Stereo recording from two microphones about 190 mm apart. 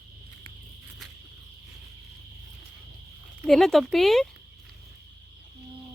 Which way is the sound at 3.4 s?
Centre (ahead or behind).